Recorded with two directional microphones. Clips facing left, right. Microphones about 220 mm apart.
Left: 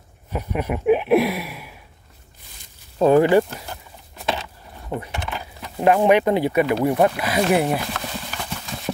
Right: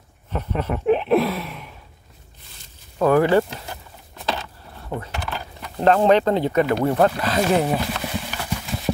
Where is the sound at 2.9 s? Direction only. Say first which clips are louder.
Left 2 dB; 20° left (ahead or behind).